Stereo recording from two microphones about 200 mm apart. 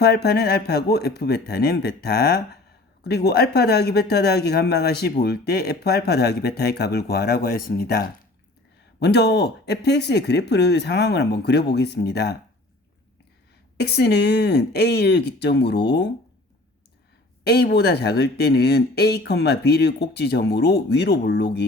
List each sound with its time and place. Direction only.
0.0 s speech: 55° left (ahead or behind)
13.7 s speech: 55° left (ahead or behind)
17.4 s speech: 55° left (ahead or behind)